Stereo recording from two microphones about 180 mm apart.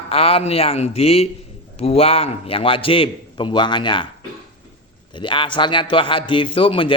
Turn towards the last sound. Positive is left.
turn(degrees=30)  # may be behind; listen again after turning